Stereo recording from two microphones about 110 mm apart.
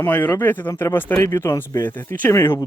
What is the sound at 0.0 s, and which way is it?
Speech, 20° left (ahead or behind).